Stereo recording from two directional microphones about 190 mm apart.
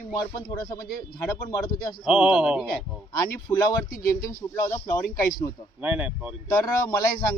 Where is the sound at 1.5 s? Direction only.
20° left (ahead or behind).